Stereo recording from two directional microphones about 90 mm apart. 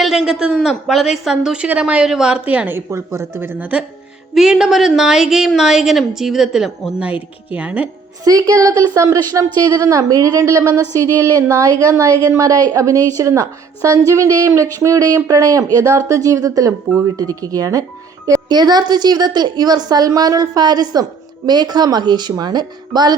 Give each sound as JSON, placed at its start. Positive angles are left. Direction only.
{"t": 0.0, "sound": "a woman's voice", "side_deg": -5}
{"t": 4.4, "sound": "a woman's voice", "side_deg": -5}
{"t": 8.2, "sound": "a woman's voice", "side_deg": -40}